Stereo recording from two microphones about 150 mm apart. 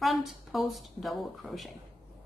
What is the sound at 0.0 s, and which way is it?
A woman's voice, centre (ahead or behind).